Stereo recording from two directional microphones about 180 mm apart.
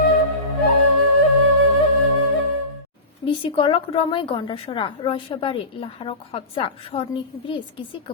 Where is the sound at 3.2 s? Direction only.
30° left (ahead or behind).